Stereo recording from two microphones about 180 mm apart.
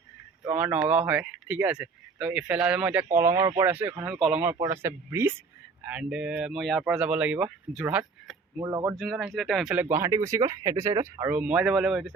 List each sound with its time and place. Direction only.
0.4 s speech: 10° right (ahead or behind)
3.7 s speech: 10° right (ahead or behind)
9.0 s speech: centre (ahead or behind)
9.8 s speech: 15° right (ahead or behind)